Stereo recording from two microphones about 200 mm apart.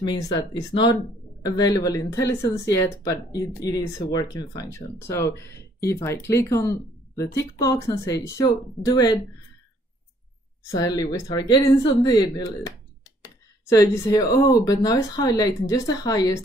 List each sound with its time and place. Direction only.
0.0 s speech: 20° left (ahead or behind)
10.6 s speech: 20° left (ahead or behind)